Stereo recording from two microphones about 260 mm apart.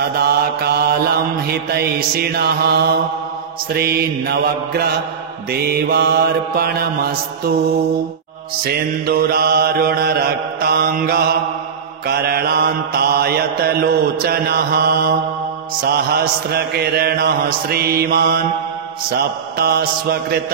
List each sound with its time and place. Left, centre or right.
0.0 s mantra: right
8.6 s mantra: right